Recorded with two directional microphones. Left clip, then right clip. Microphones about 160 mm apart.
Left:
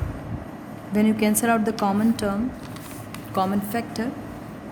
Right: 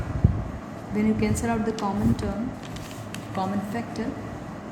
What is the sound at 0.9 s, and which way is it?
Speech, 90° left.